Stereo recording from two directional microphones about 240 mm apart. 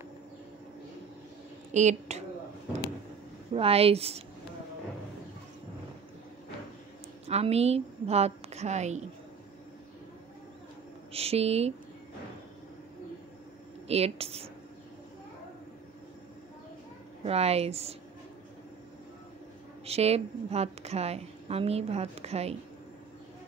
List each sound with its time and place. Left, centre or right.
1.7 s a woman's voice: right
3.5 s a woman's voice: right
7.2 s a woman's voice: right
11.1 s a woman's voice: right
13.8 s a woman's voice: right
17.2 s a woman's voice: right
19.8 s a woman's voice: right